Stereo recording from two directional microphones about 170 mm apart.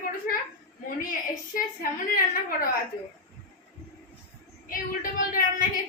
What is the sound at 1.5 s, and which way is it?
A woman's voice, 55° left (ahead or behind).